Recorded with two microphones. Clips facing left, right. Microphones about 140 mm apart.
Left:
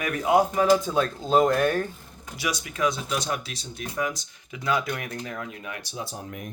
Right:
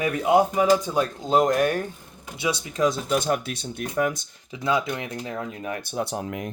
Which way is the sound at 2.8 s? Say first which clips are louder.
Right 4 dB; 45° right (ahead or behind).